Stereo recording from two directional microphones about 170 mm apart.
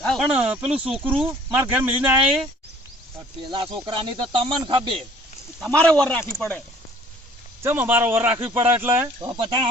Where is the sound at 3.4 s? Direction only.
30° right (ahead or behind).